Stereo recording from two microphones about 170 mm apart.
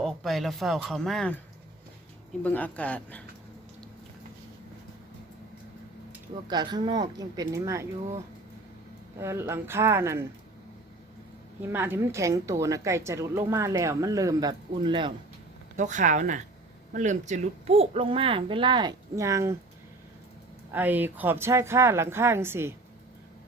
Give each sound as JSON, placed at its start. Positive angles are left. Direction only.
{"t": 0.0, "sound": "speech", "side_deg": 0}
{"t": 2.4, "sound": "speech", "side_deg": 10}
{"t": 6.5, "sound": "a woman's voice", "side_deg": -25}
{"t": 11.7, "sound": "a woman's voice", "side_deg": -10}
{"t": 15.8, "sound": "a child's voice", "side_deg": -45}
{"t": 20.7, "sound": "a woman's voice", "side_deg": -10}